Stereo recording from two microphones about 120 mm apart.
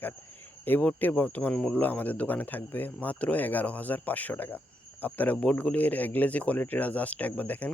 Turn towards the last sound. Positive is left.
turn(degrees=15)  # may be behind; listen again after turning